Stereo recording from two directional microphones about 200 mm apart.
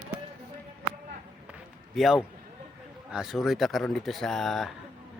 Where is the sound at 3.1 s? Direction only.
5° right (ahead or behind).